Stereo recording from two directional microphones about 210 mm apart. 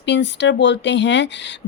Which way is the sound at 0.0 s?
55° left (ahead or behind).